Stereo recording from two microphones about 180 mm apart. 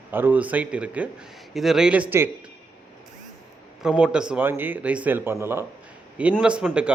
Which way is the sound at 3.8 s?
5° right (ahead or behind).